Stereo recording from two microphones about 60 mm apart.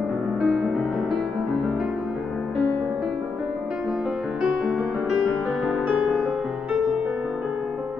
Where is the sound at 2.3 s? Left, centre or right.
Centre.